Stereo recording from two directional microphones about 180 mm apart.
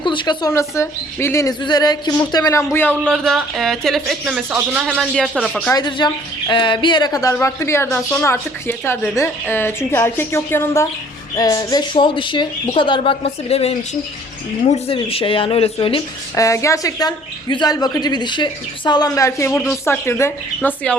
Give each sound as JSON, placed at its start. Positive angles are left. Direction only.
{"t": 0.0, "sound": "a woman's voice", "side_deg": 25}
{"t": 2.9, "sound": "speech", "side_deg": -10}
{"t": 3.2, "sound": "speech", "side_deg": 0}
{"t": 5.7, "sound": "a woman's voice", "side_deg": 25}
{"t": 16.3, "sound": "a woman's voice", "side_deg": 15}